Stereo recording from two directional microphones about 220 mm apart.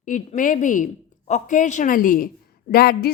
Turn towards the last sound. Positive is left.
turn(degrees=45)  # may be behind; listen again after turning